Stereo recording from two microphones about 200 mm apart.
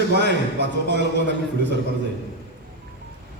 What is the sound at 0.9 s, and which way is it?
Speech, 60° right (ahead or behind).